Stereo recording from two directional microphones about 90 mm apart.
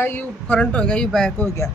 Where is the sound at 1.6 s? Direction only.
35° left (ahead or behind).